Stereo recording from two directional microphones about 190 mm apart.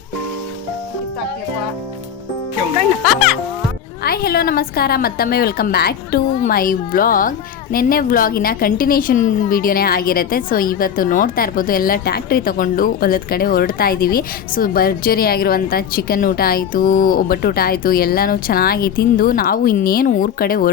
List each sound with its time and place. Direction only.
3.0 s speech: centre (ahead or behind)
4.0 s speech: 55° left (ahead or behind)